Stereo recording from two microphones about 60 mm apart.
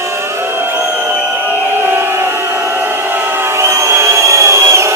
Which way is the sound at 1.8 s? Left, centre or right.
Right.